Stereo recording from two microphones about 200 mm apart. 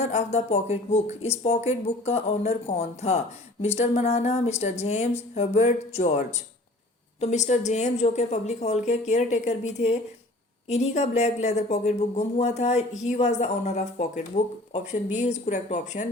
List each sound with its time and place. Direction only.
0.0 s speech: 30° left (ahead or behind)